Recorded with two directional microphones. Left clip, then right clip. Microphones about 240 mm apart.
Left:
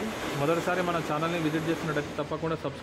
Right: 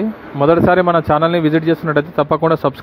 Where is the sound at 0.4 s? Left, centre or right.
Right.